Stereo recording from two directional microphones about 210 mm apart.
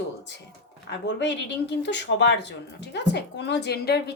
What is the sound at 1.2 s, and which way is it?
Speech, 55° left (ahead or behind).